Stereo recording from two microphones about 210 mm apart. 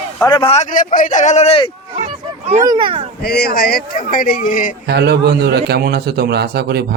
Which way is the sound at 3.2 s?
50° left (ahead or behind).